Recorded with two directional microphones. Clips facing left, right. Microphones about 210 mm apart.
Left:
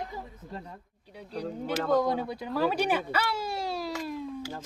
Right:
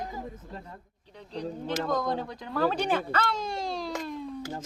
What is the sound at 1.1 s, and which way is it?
Speech, 10° left (ahead or behind).